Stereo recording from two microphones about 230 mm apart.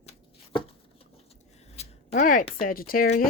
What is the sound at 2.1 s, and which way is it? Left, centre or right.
Speech, left.